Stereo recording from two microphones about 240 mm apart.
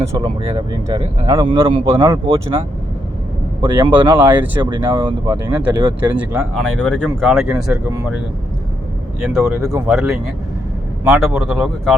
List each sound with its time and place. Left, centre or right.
0.0 s speech: centre
4.6 s speech: centre
9.6 s speech: centre